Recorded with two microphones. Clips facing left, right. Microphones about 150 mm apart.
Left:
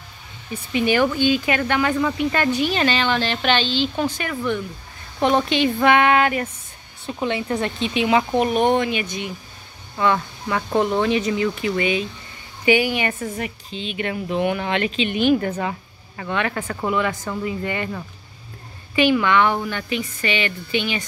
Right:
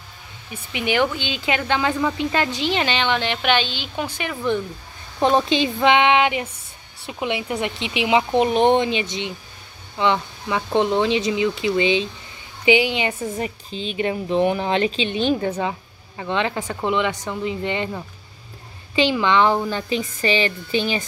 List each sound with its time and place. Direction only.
0.7 s a woman's voice: 15° right (ahead or behind)
13.4 s speech: 35° right (ahead or behind)
15.4 s speech: 15° right (ahead or behind)
16.3 s a woman's voice: 25° right (ahead or behind)
18.9 s a woman's voice: 25° right (ahead or behind)